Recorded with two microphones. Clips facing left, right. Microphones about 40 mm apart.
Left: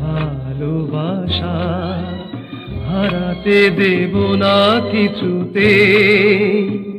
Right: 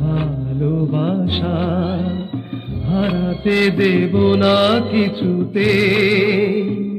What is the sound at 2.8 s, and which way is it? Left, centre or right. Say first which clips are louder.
Music: left 1 dB; left.